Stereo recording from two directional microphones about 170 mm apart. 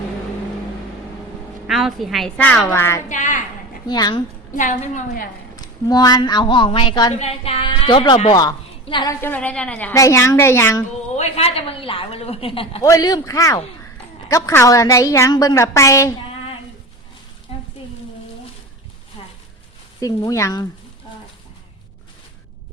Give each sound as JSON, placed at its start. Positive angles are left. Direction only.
{"t": 1.6, "sound": "a woman's voice", "side_deg": 0}
{"t": 3.1, "sound": "a woman's voice", "side_deg": 45}
{"t": 3.8, "sound": "a woman's voice", "side_deg": 25}
{"t": 4.5, "sound": "a woman's voice", "side_deg": 45}
{"t": 5.5, "sound": "a woman's voice", "side_deg": 20}
{"t": 7.1, "sound": "a woman's voice", "side_deg": 40}
{"t": 9.2, "sound": "a woman's voice", "side_deg": 10}
{"t": 11.2, "sound": "a woman's voice", "side_deg": 35}
{"t": 12.8, "sound": "a woman's voice", "side_deg": 20}
{"t": 17.5, "sound": "a sound", "side_deg": 30}
{"t": 20.0, "sound": "a woman's voice", "side_deg": 20}